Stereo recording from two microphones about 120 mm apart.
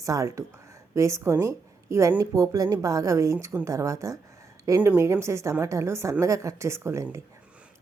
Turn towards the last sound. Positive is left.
turn(degrees=-20)  # may be behind; listen again after turning